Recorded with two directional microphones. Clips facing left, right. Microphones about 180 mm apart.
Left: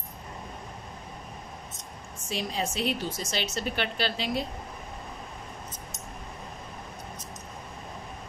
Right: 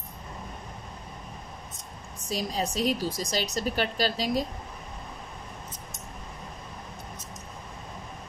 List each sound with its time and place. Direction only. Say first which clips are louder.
2.2 s a woman's voice: right 1 dB; 40° right (ahead or behind)